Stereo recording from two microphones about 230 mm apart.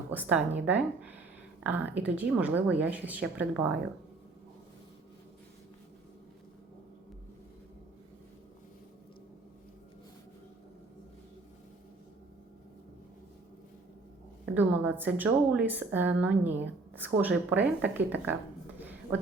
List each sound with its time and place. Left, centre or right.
0.1 s a woman's voice: centre
14.5 s a woman's voice: centre